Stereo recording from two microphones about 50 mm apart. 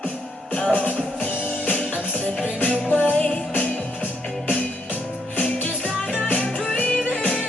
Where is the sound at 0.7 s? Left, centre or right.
Left.